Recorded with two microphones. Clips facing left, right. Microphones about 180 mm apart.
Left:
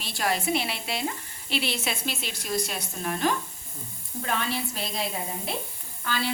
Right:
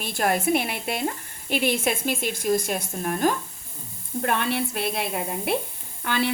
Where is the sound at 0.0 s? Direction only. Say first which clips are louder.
Right 4 dB; 50° right (ahead or behind).